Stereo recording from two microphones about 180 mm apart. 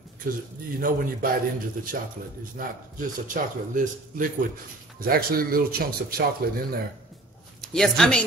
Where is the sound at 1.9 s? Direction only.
55° right (ahead or behind).